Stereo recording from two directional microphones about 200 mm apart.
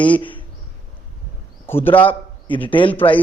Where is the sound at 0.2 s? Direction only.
25° left (ahead or behind).